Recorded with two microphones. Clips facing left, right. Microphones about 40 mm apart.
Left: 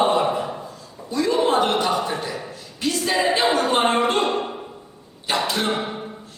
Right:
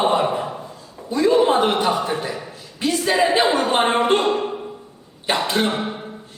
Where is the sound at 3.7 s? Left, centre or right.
Right.